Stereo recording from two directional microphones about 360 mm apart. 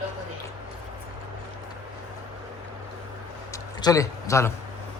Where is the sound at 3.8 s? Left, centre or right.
Centre.